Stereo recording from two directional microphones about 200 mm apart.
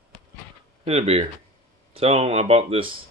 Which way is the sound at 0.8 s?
30° right (ahead or behind).